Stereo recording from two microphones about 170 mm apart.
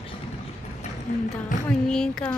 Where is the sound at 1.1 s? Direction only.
50° left (ahead or behind).